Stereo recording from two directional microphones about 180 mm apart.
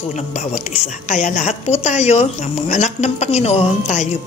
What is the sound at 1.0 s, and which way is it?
Speech, 40° left (ahead or behind).